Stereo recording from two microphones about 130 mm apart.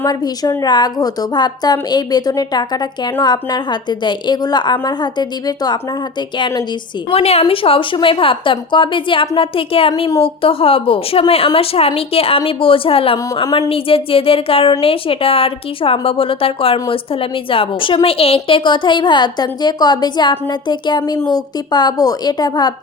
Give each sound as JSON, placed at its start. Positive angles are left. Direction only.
{"t": 0.0, "sound": "a woman's voice", "side_deg": 30}
{"t": 7.1, "sound": "a woman's voice", "side_deg": 50}
{"t": 13.3, "sound": "a woman's voice", "side_deg": 35}
{"t": 13.7, "sound": "a woman's voice", "side_deg": 45}